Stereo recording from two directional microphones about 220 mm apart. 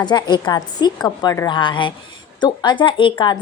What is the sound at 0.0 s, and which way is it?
A woman's voice, 20° left (ahead or behind).